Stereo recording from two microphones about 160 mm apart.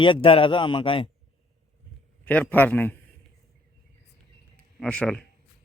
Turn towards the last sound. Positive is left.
turn(degrees=5)  # may be behind; listen again after turning